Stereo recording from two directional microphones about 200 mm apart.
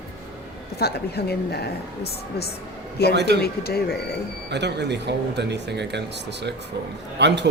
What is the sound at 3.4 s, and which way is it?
Speech, 50° left (ahead or behind).